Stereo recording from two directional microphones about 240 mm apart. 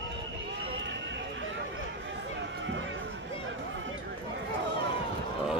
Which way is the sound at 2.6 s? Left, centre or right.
Right.